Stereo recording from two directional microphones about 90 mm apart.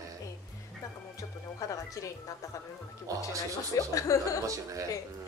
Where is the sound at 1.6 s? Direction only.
40° left (ahead or behind).